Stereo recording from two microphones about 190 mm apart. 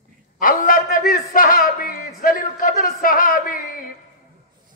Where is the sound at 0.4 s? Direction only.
50° left (ahead or behind).